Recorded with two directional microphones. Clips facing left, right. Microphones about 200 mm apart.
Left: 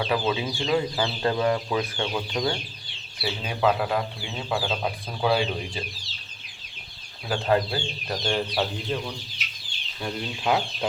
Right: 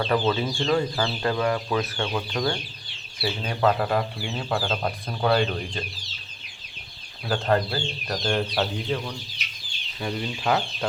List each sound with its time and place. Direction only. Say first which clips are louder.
0.0 s speech: right 2 dB; 10° left (ahead or behind)
1.2 s speech: left 2 dB; 25° left (ahead or behind)
3.2 s speech: right 1 dB; 5° left (ahead or behind)
7.3 s speech: even; 5° left (ahead or behind)